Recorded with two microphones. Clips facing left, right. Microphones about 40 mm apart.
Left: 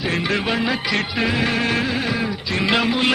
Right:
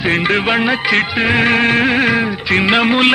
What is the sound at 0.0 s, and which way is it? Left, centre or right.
Music, right.